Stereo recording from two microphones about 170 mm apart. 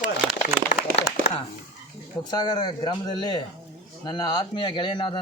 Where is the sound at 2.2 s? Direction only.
25° left (ahead or behind).